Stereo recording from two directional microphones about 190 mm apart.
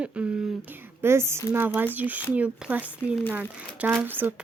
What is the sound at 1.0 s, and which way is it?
A woman's voice, 15° right (ahead or behind).